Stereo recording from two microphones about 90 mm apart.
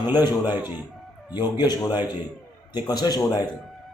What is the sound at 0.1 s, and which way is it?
A man's voice, 50° left (ahead or behind).